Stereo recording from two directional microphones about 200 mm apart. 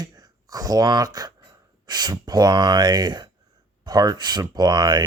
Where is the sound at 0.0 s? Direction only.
20° right (ahead or behind).